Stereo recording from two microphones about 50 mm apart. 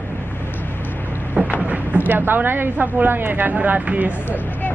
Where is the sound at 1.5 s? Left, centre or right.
Right.